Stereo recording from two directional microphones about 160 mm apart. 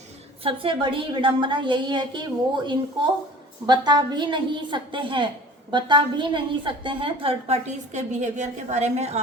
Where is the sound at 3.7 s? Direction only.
25° right (ahead or behind).